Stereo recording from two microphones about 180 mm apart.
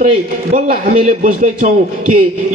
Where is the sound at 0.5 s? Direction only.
50° right (ahead or behind).